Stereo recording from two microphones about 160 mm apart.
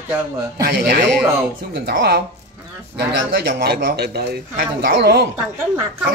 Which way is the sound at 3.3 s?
90° right.